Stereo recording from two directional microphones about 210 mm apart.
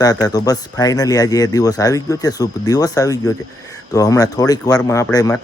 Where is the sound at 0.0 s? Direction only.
20° left (ahead or behind).